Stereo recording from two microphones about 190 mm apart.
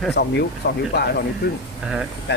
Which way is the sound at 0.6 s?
55° left (ahead or behind).